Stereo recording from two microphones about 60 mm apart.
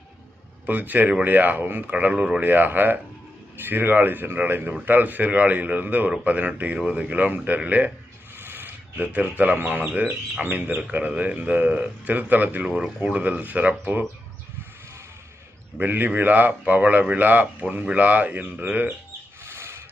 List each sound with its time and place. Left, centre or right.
0.6 s speech: right
1.9 s speech: right
2.4 s speech: right
8.4 s speech: right
12.6 s speech: centre
15.8 s speech: right
19.5 s bird: right